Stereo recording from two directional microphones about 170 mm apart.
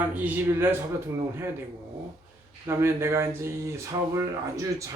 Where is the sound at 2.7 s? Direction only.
15° right (ahead or behind).